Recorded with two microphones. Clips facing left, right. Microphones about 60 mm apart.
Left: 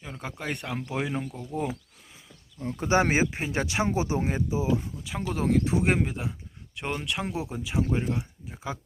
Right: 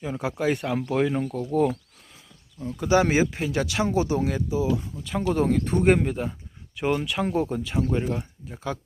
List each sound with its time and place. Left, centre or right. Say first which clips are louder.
0.0 s speech: right 10 dB; centre
2.6 s speech: right 3 dB; left
5.0 s speech: right 6 dB; centre